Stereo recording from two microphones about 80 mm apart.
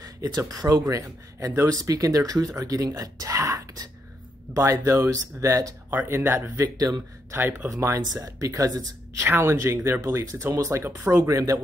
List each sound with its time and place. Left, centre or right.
0.0 s speech: right
5.9 s speech: right
6.6 s speech: right
7.3 s speech: right
7.7 s speech: right
9.2 s speech: right
10.8 s speech: right
11.2 s speech: right